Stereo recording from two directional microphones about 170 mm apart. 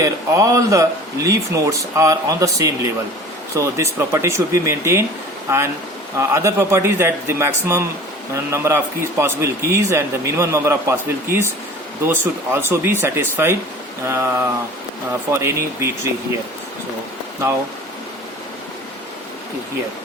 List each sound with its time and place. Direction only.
0.0 s a man's voice: 20° right (ahead or behind)
6.1 s a man's voice: 15° right (ahead or behind)